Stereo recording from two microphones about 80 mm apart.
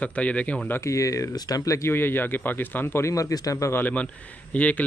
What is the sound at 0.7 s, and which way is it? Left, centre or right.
Speech, left.